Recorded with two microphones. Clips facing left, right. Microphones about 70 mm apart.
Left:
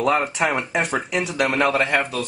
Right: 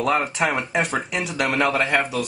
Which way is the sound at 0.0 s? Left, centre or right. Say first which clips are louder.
Left 1 dB; centre.